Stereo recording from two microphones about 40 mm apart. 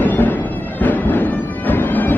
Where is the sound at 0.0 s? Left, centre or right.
Left.